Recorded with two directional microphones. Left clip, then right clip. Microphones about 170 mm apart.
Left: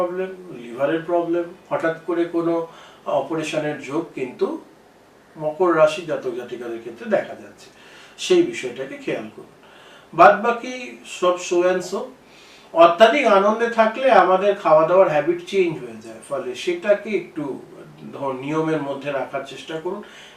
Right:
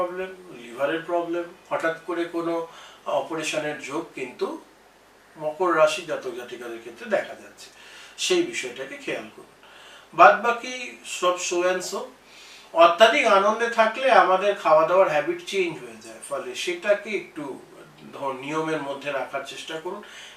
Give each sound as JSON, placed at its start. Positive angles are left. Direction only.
{"t": 0.0, "sound": "speech", "side_deg": 15}
{"t": 5.4, "sound": "speech", "side_deg": 20}
{"t": 5.7, "sound": "speech", "side_deg": 10}
{"t": 16.5, "sound": "speech", "side_deg": 10}